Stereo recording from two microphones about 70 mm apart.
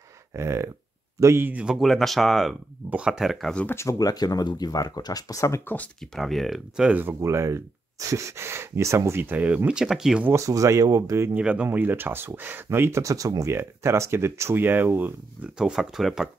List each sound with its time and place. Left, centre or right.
0.3 s speech: right
1.4 s speech: right
1.7 s speech: centre
2.9 s speech: centre
3.6 s speech: left
4.0 s speech: left
5.9 s speech: centre
7.2 s speech: right
9.7 s speech: centre
10.3 s speech: right
11.3 s speech: centre; by 13.0 s right
13.0 s speech: right
13.5 s speech: right
15.4 s speech: centre